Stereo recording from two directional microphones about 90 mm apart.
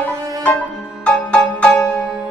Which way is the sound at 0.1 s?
40° right (ahead or behind).